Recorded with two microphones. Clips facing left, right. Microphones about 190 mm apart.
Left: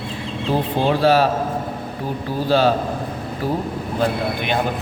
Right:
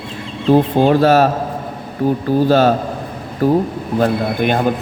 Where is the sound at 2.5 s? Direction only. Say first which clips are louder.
Even; 45° right (ahead or behind).